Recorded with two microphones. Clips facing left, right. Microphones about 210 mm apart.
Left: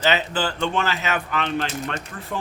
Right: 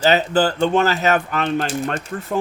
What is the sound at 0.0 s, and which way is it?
Speech, 40° right (ahead or behind).